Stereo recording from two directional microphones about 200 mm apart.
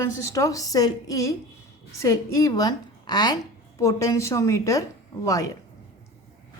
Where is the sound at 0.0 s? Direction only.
15° left (ahead or behind).